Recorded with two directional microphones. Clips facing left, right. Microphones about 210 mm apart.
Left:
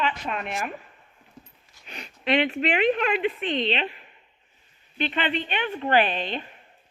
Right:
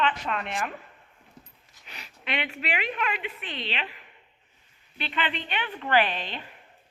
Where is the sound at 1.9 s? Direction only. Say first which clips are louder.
Left 10 dB; 30° left (ahead or behind).